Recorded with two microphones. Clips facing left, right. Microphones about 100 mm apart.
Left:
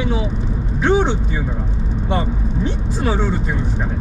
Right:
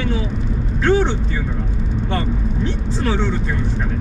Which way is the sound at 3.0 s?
10° left (ahead or behind).